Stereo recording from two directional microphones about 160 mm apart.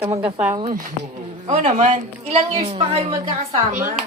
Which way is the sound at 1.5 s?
40° right (ahead or behind).